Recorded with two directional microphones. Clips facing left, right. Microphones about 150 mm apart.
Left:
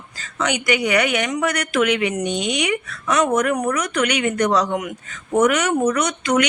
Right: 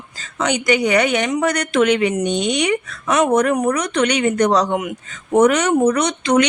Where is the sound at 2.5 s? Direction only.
35° right (ahead or behind).